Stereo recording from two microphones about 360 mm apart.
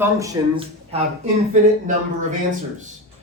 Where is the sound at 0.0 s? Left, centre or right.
Centre.